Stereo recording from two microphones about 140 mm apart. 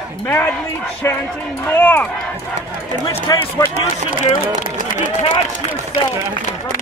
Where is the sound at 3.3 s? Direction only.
30° left (ahead or behind).